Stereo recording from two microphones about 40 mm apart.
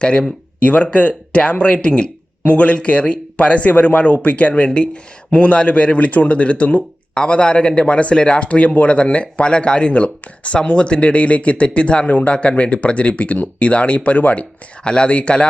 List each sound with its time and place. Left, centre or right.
0.0 s speech: left
14.8 s speech: left